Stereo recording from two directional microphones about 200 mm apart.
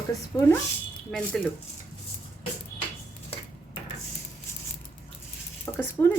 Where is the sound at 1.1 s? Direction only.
Centre (ahead or behind).